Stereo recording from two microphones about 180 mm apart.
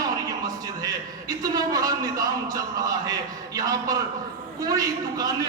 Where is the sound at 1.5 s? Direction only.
20° right (ahead or behind).